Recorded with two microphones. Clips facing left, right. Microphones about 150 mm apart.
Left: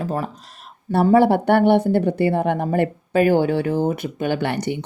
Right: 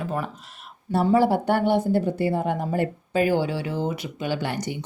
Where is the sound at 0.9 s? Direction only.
60° left (ahead or behind).